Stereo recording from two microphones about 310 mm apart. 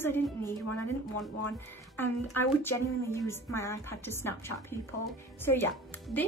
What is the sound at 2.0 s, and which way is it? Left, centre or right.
A woman's voice, centre.